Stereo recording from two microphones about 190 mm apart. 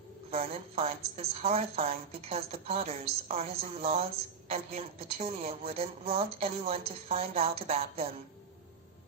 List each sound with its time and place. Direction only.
0.3 s a woman's voice: 30° right (ahead or behind)